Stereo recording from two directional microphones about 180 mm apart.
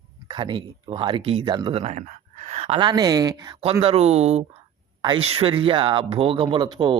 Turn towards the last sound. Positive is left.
turn(degrees=-25)  # may be behind; listen again after turning